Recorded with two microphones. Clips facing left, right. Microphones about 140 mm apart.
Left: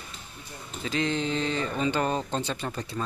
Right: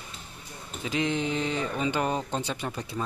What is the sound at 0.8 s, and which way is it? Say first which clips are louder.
Speech: even; 15° right (ahead or behind).